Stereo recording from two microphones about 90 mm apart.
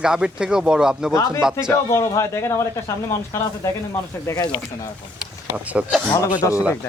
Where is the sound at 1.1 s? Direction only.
35° left (ahead or behind).